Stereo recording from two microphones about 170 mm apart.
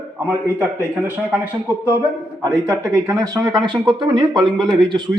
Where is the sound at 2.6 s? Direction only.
20° right (ahead or behind).